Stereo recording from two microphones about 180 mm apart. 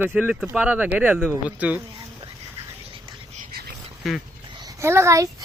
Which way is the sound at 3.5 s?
60° right (ahead or behind).